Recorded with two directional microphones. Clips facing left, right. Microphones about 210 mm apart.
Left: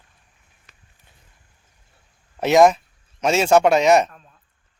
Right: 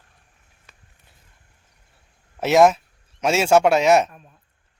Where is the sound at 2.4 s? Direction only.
5° right (ahead or behind).